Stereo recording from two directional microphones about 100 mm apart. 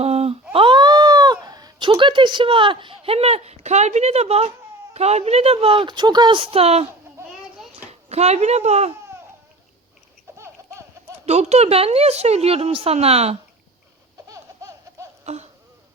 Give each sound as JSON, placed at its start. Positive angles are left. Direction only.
{"t": 0.0, "sound": "a sound", "side_deg": -90}
{"t": 0.5, "sound": "cat", "side_deg": -55}
{"t": 4.9, "sound": "a woman's voice", "side_deg": -90}
{"t": 8.1, "sound": "a woman's voice", "side_deg": -90}
{"t": 10.3, "sound": "baby laughter", "side_deg": -30}
{"t": 11.3, "sound": "a woman's voice", "side_deg": -90}
{"t": 14.3, "sound": "laughter", "side_deg": -35}
{"t": 15.2, "sound": "a sound", "side_deg": -90}